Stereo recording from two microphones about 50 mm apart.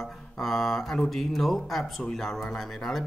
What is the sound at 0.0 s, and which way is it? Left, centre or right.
Mantra, centre.